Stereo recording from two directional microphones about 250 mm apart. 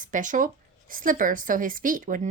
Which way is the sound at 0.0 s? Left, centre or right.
Right.